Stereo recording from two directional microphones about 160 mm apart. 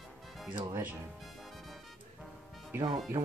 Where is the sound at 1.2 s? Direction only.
Centre (ahead or behind).